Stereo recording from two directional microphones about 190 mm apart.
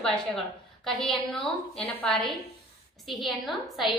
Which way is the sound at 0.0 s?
5° left (ahead or behind).